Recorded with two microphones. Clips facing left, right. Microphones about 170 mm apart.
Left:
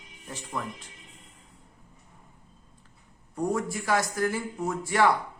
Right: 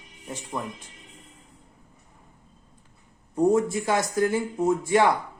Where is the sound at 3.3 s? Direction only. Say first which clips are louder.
Right 8 dB; 20° right (ahead or behind).